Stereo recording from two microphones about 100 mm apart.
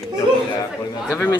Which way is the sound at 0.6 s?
30° left (ahead or behind).